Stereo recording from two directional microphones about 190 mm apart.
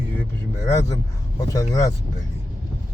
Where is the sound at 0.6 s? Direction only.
15° left (ahead or behind).